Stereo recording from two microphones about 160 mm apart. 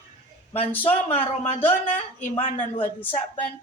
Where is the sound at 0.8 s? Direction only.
35° left (ahead or behind).